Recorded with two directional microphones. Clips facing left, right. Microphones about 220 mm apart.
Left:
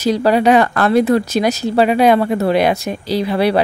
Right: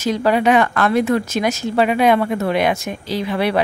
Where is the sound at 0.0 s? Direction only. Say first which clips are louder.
Left 3 dB; 35° left (ahead or behind).